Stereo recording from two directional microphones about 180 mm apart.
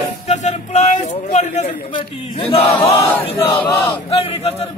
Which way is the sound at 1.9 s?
30° left (ahead or behind).